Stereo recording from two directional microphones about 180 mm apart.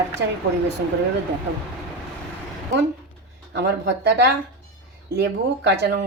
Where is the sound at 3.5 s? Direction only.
70° right (ahead or behind).